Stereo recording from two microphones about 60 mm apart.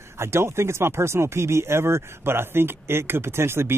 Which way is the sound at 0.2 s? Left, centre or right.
Right.